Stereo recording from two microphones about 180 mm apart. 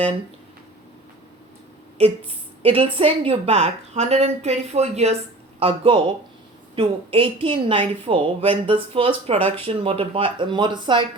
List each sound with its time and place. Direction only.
2.6 s a woman's voice: 30° right (ahead or behind)